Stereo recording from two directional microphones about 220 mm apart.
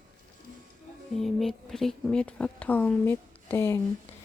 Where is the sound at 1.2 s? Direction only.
Centre (ahead or behind).